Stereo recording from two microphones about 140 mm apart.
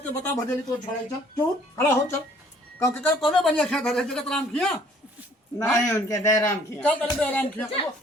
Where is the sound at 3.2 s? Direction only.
Centre (ahead or behind).